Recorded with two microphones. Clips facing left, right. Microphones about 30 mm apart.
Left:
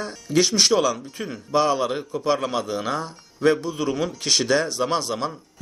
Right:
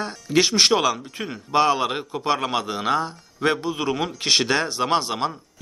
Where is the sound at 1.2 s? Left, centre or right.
Right.